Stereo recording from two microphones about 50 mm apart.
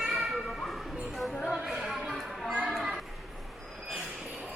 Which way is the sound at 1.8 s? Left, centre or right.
Centre.